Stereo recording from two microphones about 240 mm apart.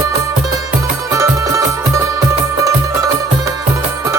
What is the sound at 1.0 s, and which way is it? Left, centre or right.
Music, centre.